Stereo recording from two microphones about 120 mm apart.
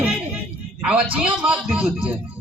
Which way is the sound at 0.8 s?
10° right (ahead or behind).